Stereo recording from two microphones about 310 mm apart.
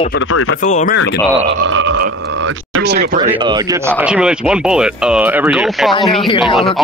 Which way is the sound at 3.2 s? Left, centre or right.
Centre.